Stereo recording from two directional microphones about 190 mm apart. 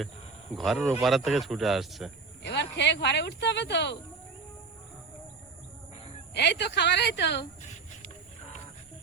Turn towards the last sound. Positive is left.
turn(degrees=65)  # may be behind; listen again after turning